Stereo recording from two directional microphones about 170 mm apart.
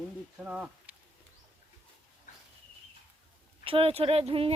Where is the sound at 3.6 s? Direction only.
30° right (ahead or behind).